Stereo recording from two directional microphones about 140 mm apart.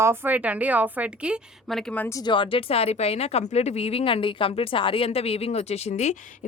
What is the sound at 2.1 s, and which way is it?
Speech, 35° left (ahead or behind).